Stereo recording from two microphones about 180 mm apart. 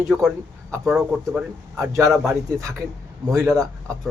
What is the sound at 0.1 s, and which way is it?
Speech, 10° right (ahead or behind).